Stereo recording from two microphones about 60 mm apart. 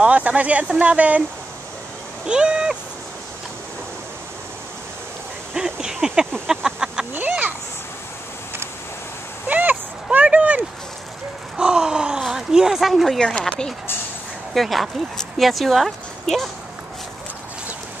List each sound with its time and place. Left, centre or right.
0.0 s speech: right
2.2 s speech: centre
5.5 s a sound: centre
6.4 s speech: centre
7.2 s speech: right
9.5 s a sound: right; by 12.2 s centre
12.2 s speech: centre
13.2 s speech: centre
14.5 s speech: centre